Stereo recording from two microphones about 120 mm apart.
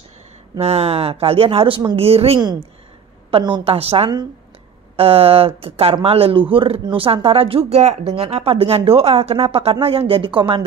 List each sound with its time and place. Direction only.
0.6 s speech: 55° right (ahead or behind)